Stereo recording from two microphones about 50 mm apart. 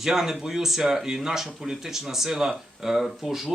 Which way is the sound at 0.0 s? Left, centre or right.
Centre.